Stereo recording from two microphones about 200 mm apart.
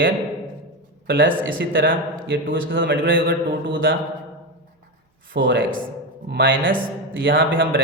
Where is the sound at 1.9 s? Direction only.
70° right (ahead or behind).